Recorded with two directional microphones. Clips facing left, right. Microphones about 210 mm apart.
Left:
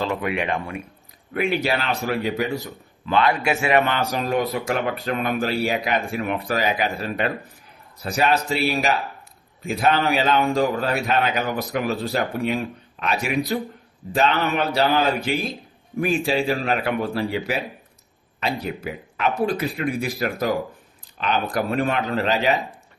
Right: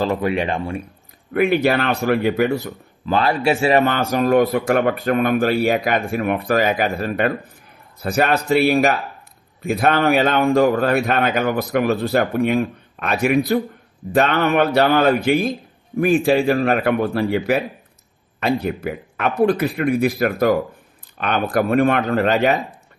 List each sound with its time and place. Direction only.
0.0 s speech: 35° right (ahead or behind)
1.3 s a man's voice: 55° right (ahead or behind)
3.1 s a man's voice: 35° right (ahead or behind); by 22.5 s 55° right (ahead or behind)